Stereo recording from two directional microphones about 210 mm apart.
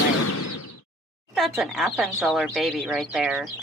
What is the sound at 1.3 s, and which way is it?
Speech, centre (ahead or behind).